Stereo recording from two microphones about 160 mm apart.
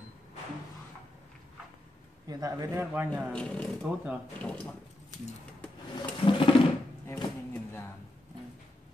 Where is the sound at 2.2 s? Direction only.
20° right (ahead or behind).